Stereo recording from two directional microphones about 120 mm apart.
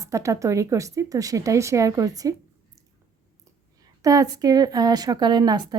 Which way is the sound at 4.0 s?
30° right (ahead or behind).